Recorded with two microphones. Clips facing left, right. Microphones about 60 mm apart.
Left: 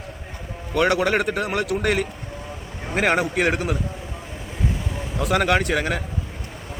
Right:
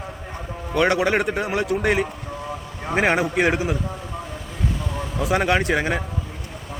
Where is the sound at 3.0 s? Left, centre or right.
Left.